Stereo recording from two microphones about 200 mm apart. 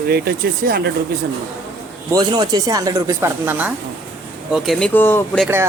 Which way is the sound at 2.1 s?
20° right (ahead or behind).